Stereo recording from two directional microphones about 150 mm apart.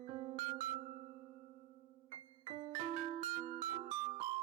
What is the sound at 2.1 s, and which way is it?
Music, 40° right (ahead or behind).